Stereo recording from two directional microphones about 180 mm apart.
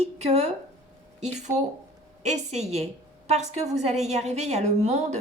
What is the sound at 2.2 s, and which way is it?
A woman's voice, 40° right (ahead or behind).